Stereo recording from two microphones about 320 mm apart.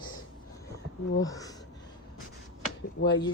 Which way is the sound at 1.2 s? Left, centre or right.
Centre.